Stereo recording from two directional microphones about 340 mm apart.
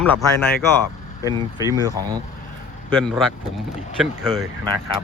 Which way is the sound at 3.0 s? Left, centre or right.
Centre.